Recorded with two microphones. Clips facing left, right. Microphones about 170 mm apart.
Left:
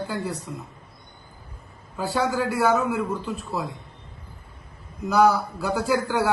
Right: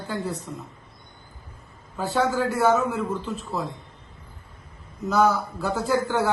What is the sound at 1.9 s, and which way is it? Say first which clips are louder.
A man's voice: right 1 dB; centre (ahead or behind).